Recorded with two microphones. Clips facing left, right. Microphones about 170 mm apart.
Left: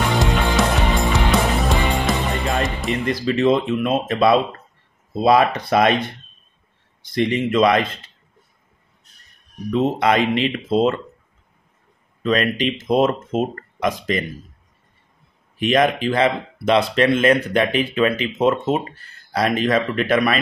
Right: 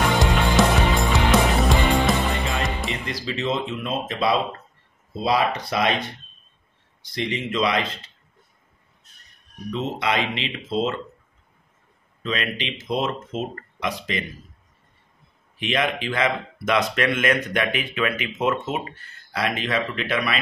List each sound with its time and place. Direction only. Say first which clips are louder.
0.2 s music: even; centre (ahead or behind)
3.1 s speech: left 10 dB; 55° left (ahead or behind)
9.7 s speech: left 7 dB; 50° left (ahead or behind)
12.2 s speech: left 8 dB; 45° left (ahead or behind)
15.6 s speech: left 7 dB; 40° left (ahead or behind)